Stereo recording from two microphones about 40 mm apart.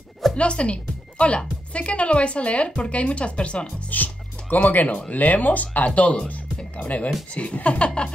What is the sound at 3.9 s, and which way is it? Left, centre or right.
Speech, left.